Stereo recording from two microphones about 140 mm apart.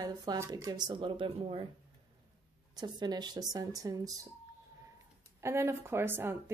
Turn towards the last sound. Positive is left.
turn(degrees=-15)  # may be behind; listen again after turning